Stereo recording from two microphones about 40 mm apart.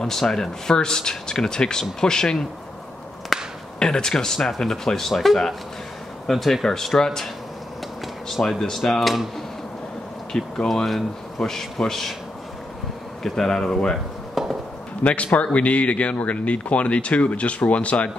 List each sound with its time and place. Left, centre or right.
0.0 s speech: centre
3.3 s a sound: centre
3.8 s speech: centre
8.3 s speech: centre
10.3 s speech: left
10.7 s speech: centre
13.2 s speech: centre
14.4 s speech: centre
15.3 s speech: left